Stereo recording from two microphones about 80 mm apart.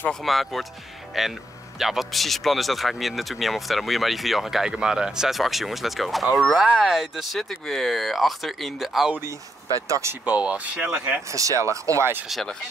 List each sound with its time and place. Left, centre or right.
0.1 s speech: centre
9.8 s speech: right
10.2 s speech: centre
11.3 s speech: right
12.3 s speech: centre